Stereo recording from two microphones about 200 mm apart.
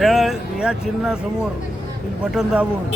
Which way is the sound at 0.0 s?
Centre (ahead or behind).